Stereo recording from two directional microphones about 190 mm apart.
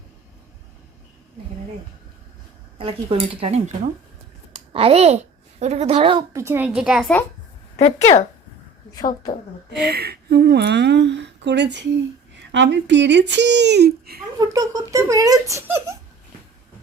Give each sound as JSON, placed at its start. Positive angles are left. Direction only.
{"t": 2.7, "sound": "a child's voice", "side_deg": -30}
{"t": 6.3, "sound": "speech", "side_deg": -15}
{"t": 7.8, "sound": "speech", "side_deg": 35}
{"t": 9.8, "sound": "speech", "side_deg": -55}
{"t": 14.3, "sound": "speech", "side_deg": -20}